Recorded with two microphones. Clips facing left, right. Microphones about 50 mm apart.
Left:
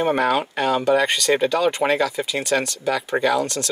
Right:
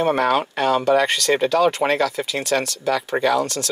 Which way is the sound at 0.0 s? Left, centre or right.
Centre.